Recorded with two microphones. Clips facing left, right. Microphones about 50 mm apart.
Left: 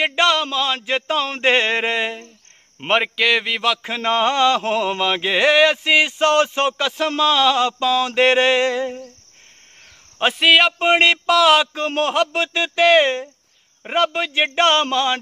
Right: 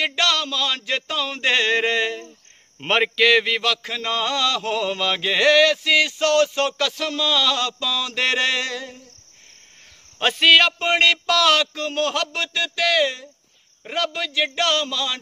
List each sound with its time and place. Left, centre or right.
0.0 s speech: left
2.9 s a man's voice: centre; by 9.0 s left
10.1 s a man's voice: centre
10.9 s a man's voice: left